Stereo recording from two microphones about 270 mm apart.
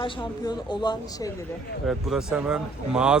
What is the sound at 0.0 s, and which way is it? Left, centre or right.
A woman's voice, centre.